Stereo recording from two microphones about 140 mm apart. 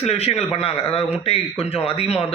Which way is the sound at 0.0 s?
50° left (ahead or behind).